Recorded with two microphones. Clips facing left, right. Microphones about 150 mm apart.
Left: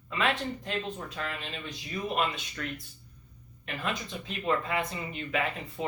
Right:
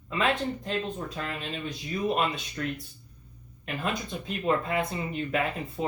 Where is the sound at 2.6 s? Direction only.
30° right (ahead or behind).